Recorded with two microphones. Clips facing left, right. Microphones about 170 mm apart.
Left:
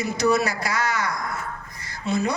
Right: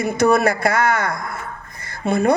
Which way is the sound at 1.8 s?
55° right (ahead or behind).